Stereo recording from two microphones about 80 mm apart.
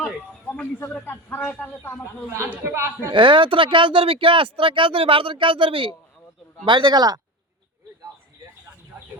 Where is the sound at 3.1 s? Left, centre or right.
Right.